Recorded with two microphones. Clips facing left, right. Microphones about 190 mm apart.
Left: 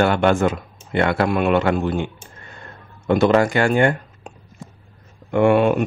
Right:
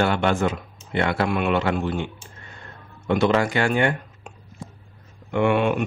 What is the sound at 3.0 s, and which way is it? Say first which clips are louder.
Speech: left 4 dB; 45° left (ahead or behind).